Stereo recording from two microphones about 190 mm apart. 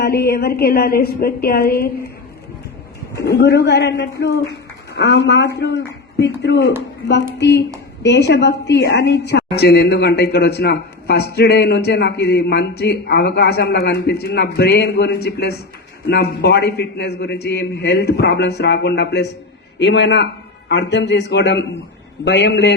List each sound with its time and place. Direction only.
0.0 s a woman's voice: 55° left (ahead or behind)
3.2 s a woman's voice: 60° left (ahead or behind)